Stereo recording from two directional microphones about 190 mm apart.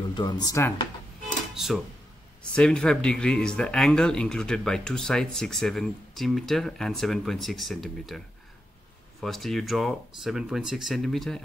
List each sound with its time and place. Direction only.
0.1 s speech: 20° left (ahead or behind)
1.5 s speech: centre (ahead or behind)
9.2 s speech: centre (ahead or behind)